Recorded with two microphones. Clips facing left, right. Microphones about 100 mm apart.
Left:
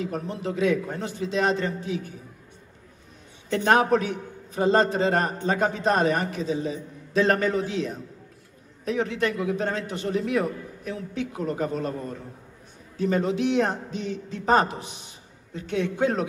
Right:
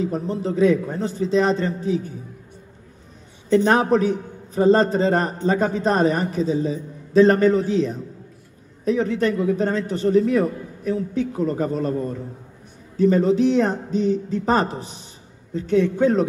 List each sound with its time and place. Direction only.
0.0 s a man's voice: 35° right (ahead or behind)
3.7 s a man's voice: 35° right (ahead or behind)
8.8 s a man's voice: 35° right (ahead or behind)
12.9 s a man's voice: 35° right (ahead or behind)